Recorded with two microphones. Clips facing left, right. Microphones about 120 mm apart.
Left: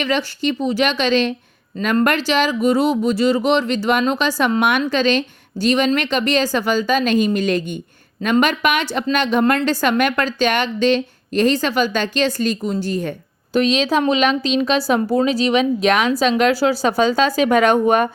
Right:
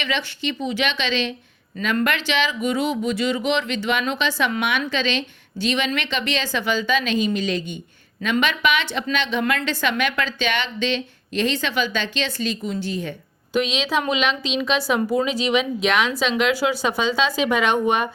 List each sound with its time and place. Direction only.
0.0 s a woman's voice: 40° left (ahead or behind)